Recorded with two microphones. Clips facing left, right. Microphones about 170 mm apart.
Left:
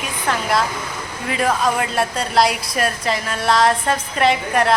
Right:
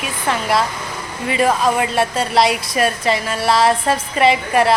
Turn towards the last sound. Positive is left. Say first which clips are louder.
# right 2 dB
turn(degrees=-5)  # may be behind; listen again after turning